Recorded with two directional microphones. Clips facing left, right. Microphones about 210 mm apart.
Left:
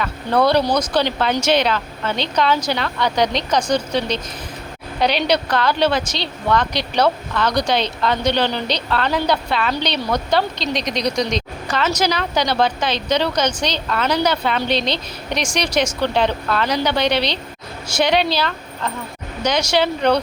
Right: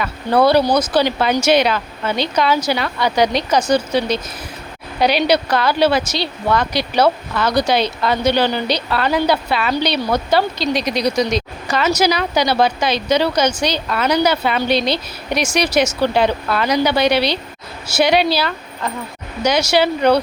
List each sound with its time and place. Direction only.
0.0 s a woman's voice: 5° right (ahead or behind)